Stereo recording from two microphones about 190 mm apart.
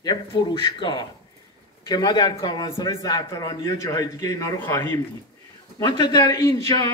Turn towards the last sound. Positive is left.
turn(degrees=15)  # may be behind; listen again after turning